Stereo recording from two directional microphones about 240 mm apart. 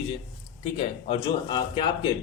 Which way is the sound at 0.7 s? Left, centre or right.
Left.